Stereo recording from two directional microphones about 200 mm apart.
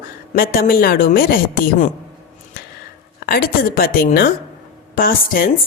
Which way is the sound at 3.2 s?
50° left (ahead or behind).